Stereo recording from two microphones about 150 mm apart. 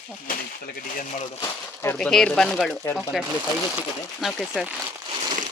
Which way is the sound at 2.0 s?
5° left (ahead or behind).